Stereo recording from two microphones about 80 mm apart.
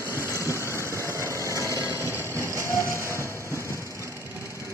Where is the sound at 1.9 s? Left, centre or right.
Left.